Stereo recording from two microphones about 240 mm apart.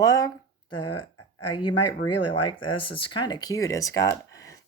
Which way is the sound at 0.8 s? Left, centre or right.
Left.